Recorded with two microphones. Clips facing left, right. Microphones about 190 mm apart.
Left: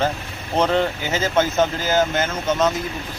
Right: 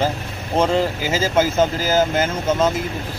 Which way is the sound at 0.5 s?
5° right (ahead or behind).